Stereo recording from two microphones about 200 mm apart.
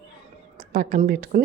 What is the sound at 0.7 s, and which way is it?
Speech, 45° right (ahead or behind).